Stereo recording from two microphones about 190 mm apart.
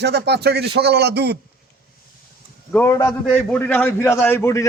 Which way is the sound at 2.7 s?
15° left (ahead or behind).